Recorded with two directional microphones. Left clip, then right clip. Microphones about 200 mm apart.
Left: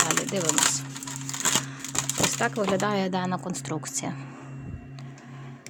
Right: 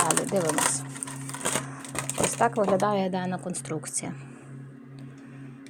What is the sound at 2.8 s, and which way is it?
Speech, 15° left (ahead or behind).